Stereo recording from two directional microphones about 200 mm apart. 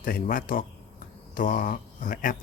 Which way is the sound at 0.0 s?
45° left (ahead or behind).